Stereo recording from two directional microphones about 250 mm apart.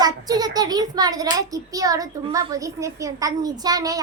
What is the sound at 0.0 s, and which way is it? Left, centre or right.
A child's voice, centre.